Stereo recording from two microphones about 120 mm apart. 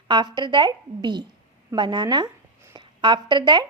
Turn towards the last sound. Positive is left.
turn(degrees=-40)  # may be behind; listen again after turning